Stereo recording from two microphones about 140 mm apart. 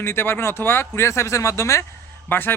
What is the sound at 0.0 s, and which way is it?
A man's voice, 15° left (ahead or behind).